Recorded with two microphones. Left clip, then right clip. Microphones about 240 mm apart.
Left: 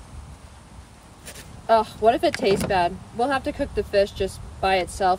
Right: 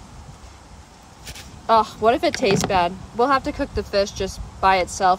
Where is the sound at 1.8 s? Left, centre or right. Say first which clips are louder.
Right 1 dB; right.